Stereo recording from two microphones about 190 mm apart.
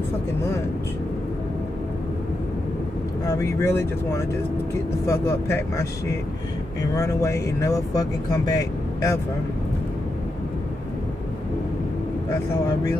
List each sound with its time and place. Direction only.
3.3 s speech: 15° left (ahead or behind)